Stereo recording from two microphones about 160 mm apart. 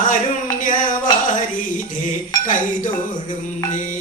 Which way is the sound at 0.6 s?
55° left (ahead or behind).